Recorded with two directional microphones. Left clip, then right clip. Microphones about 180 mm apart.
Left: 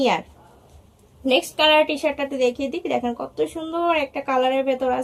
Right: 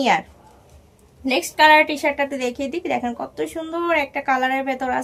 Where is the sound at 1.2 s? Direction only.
40° right (ahead or behind).